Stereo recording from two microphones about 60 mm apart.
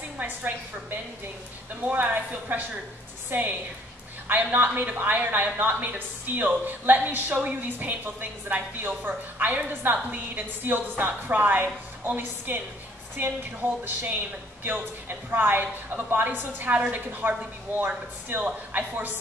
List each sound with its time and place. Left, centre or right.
0.2 s speech: right
1.9 s a woman's voice: right